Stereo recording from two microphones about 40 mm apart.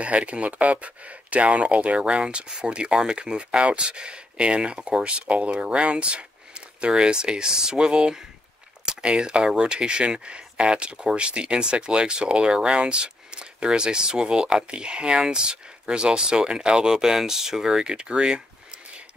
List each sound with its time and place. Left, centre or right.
0.0 s speech: right
2.0 s speech: right